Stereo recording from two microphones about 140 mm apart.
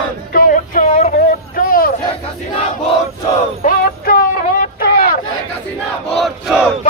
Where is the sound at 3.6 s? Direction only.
90° left.